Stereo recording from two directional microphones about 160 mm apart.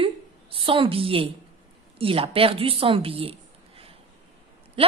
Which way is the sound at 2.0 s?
35° right (ahead or behind).